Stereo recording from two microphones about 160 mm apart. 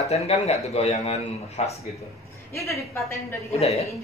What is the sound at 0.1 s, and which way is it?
A man's voice, 40° left (ahead or behind).